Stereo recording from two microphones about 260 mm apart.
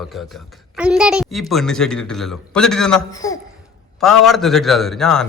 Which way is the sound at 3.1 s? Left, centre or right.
Centre.